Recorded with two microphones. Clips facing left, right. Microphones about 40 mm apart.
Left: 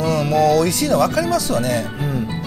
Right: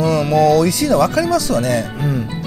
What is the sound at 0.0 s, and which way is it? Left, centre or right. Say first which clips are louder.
Speech: right 3 dB; right.